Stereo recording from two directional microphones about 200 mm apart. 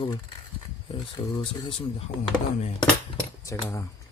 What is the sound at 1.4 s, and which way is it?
Speech, 25° left (ahead or behind).